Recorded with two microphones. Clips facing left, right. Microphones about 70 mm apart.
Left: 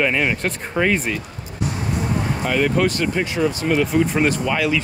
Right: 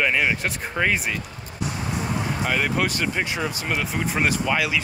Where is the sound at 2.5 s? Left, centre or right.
Centre.